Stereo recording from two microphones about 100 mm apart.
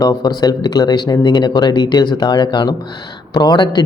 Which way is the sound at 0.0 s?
45° left (ahead or behind).